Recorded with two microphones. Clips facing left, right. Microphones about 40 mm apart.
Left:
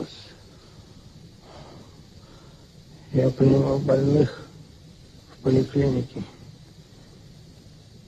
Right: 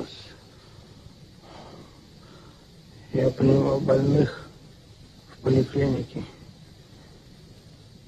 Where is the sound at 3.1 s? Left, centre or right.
Centre.